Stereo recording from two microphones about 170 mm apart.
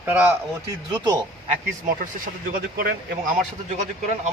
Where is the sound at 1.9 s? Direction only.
55° right (ahead or behind).